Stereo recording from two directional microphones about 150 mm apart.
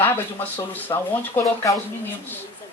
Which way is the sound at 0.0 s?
15° left (ahead or behind).